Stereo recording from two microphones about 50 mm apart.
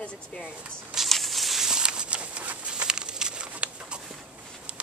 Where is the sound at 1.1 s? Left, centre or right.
Centre.